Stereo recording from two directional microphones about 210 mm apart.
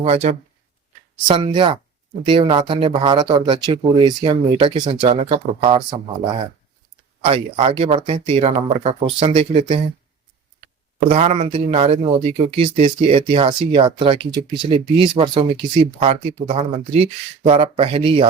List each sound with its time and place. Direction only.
0.0 s speech: 30° right (ahead or behind)
7.3 s speech: 30° right (ahead or behind)
11.1 s speech: 30° right (ahead or behind)